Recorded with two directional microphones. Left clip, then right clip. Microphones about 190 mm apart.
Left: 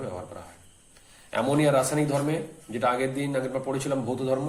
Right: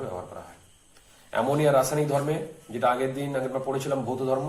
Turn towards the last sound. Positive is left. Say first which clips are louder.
# right 1 dB
turn(degrees=40)  # may be behind; listen again after turning